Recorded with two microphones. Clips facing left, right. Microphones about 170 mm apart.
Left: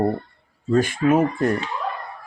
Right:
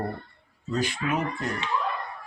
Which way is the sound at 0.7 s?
50° left (ahead or behind).